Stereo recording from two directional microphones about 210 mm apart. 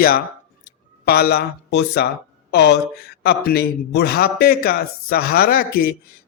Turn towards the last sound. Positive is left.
turn(degrees=45)  # may be behind; listen again after turning